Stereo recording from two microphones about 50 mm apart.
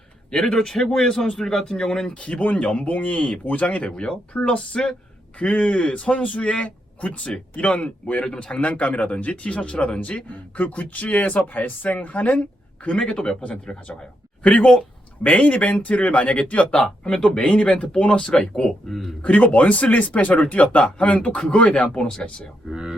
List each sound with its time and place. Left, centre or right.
0.3 s speech: centre
2.1 s speech: left
3.8 s speech: centre
12.8 s speech: left
15.2 s speech: left
17.0 s speech: centre
19.2 s speech: left
22.7 s speech: centre